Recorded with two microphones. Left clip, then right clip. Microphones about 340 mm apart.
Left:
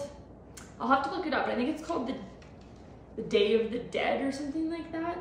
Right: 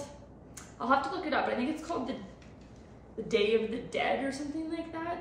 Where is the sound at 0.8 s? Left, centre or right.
Centre.